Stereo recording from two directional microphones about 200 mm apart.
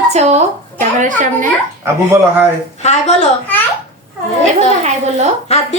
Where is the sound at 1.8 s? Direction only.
15° right (ahead or behind).